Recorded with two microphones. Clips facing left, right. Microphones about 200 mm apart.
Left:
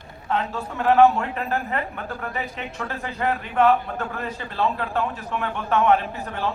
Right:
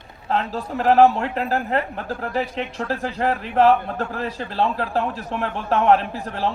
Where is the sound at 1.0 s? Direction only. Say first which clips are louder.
Right 1 dB; 35° right (ahead or behind).